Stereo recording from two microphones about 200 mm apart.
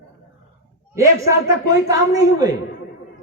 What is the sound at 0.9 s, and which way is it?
A man's voice, 15° right (ahead or behind).